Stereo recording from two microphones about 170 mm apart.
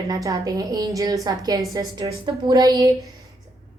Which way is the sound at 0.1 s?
20° right (ahead or behind).